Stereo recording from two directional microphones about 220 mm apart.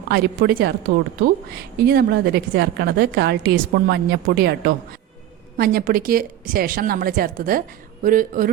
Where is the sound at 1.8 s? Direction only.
45° right (ahead or behind).